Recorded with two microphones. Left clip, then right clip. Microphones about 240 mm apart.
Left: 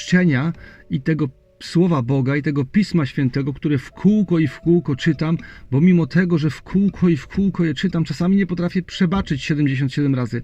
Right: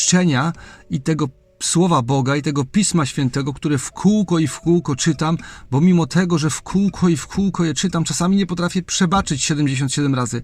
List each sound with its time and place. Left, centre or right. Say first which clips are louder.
0.0 s speech: right 2 dB; right